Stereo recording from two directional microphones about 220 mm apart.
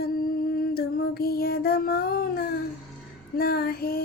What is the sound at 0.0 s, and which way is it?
Female singing, 40° left (ahead or behind).